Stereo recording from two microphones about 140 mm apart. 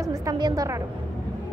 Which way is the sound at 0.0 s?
25° right (ahead or behind).